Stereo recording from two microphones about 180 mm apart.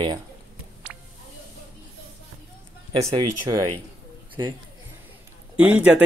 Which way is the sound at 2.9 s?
30° right (ahead or behind).